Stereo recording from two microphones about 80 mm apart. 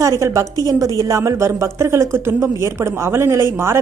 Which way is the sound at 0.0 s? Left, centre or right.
Right.